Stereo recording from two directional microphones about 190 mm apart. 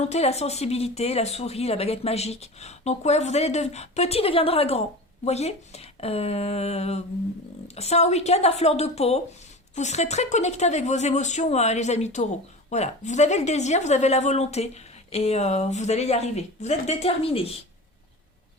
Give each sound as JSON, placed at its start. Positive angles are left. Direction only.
{"t": 0.0, "sound": "speech", "side_deg": 35}